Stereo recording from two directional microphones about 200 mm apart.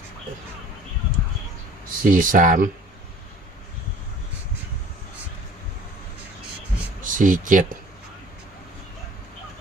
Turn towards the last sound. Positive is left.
turn(degrees=-40)  # may be behind; listen again after turning